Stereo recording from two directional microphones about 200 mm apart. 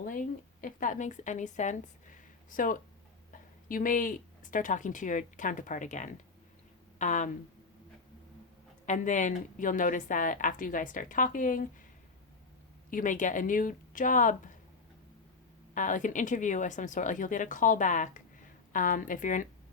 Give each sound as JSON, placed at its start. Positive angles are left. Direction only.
{"t": 0.0, "sound": "a woman's voice", "side_deg": 40}
{"t": 8.9, "sound": "a woman's voice", "side_deg": 40}
{"t": 12.9, "sound": "a woman's voice", "side_deg": 40}
{"t": 15.7, "sound": "a woman's voice", "side_deg": 40}